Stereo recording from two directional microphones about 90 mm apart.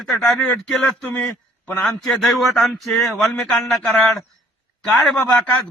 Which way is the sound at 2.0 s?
5° left (ahead or behind).